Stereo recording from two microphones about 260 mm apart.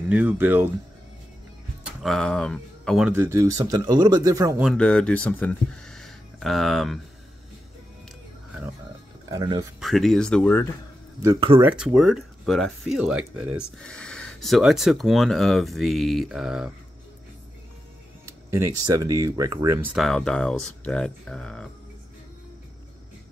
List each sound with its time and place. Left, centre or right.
0.1 s speech: centre
2.0 s speech: centre
4.6 s speech: centre
9.3 s speech: centre
9.8 s speech: centre
11.2 s speech: centre
11.6 s speech: centre
18.2 s speech: centre